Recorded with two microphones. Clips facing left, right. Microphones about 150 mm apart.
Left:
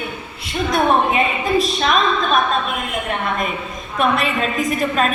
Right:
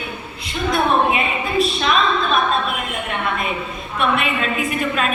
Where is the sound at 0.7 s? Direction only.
40° left (ahead or behind).